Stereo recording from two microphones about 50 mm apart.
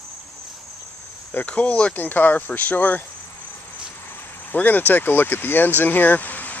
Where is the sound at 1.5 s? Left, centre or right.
Left.